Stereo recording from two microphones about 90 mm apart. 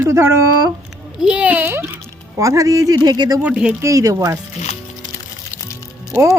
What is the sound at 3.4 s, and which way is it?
Speech, 15° right (ahead or behind).